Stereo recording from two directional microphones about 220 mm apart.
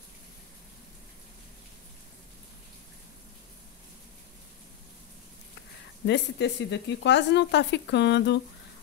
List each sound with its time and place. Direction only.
6.0 s speech: 55° left (ahead or behind)